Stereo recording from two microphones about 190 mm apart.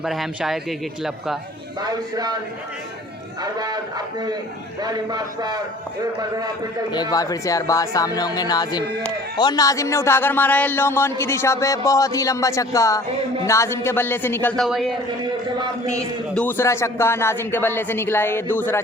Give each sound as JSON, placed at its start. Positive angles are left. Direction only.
{"t": 0.0, "sound": "speech", "side_deg": 0}
{"t": 1.8, "sound": "a man's voice", "side_deg": -20}
{"t": 3.4, "sound": "a man's voice", "side_deg": -20}
{"t": 6.9, "sound": "speech", "side_deg": 20}
{"t": 16.3, "sound": "speech", "side_deg": 10}